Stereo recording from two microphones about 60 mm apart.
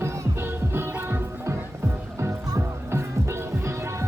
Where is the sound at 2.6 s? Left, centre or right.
Right.